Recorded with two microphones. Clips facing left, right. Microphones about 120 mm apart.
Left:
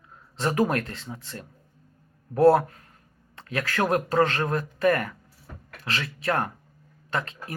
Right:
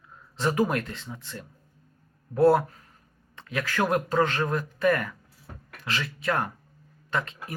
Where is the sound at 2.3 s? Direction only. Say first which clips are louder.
Left 2 dB; 50° left (ahead or behind).